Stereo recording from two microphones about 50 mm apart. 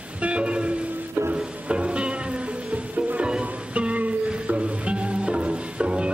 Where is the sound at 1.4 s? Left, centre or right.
Right.